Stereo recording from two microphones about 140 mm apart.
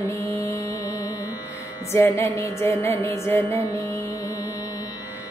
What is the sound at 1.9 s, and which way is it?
Music, 20° left (ahead or behind).